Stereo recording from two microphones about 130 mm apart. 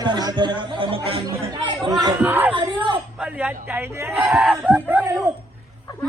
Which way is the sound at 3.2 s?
10° right (ahead or behind).